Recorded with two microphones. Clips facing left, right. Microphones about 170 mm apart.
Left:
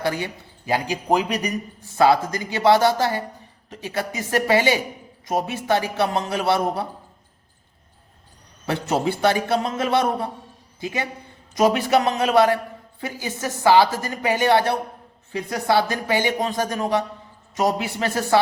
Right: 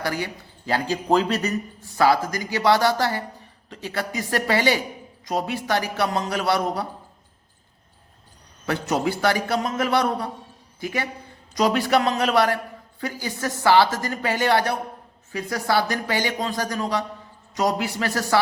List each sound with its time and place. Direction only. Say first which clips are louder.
0.0 s a man's voice: left 2 dB; 20° left (ahead or behind)
8.6 s a man's voice: left 1 dB; 25° left (ahead or behind)